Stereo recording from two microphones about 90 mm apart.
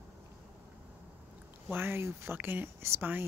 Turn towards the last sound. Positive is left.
turn(degrees=-25)  # may be behind; listen again after turning